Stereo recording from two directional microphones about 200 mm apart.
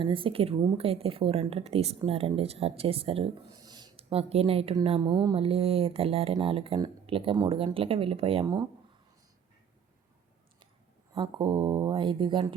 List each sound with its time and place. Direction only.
0.0 s speech: 25° right (ahead or behind)
11.1 s speech: 25° right (ahead or behind)